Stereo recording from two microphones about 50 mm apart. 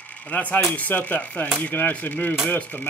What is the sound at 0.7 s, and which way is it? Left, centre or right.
Speech, left.